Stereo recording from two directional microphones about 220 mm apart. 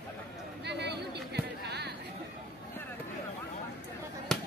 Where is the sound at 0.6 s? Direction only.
50° right (ahead or behind).